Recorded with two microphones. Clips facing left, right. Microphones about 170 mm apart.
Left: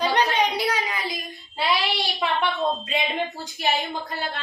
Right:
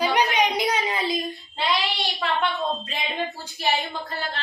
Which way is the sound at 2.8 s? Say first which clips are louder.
Left 3 dB; 20° left (ahead or behind).